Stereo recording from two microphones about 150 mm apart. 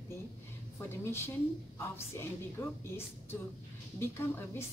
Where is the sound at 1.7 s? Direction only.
15° left (ahead or behind).